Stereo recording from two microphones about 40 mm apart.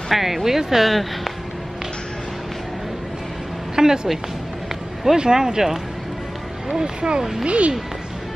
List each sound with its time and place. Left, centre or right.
0.1 s speech: centre
3.7 s speech: centre